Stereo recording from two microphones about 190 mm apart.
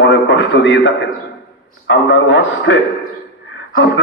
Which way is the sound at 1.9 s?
75° left (ahead or behind).